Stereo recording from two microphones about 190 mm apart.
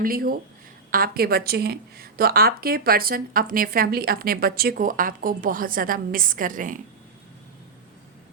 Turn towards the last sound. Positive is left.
turn(degrees=-45)  # may be behind; listen again after turning